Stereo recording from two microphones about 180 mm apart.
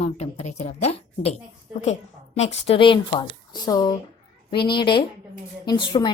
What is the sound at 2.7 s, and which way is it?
A woman's voice, 30° left (ahead or behind).